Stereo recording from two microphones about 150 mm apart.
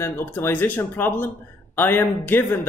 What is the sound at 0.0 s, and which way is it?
Speech, 15° left (ahead or behind).